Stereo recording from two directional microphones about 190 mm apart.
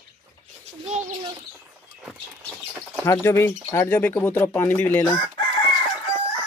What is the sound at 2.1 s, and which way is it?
Bird, centre (ahead or behind).